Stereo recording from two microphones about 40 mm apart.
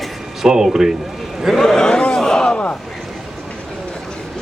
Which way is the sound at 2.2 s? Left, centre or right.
Centre.